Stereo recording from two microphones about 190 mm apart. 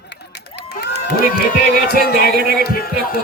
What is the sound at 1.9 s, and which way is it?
Speech, 50° right (ahead or behind).